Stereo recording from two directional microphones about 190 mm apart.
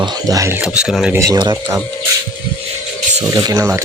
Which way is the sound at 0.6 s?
5° right (ahead or behind).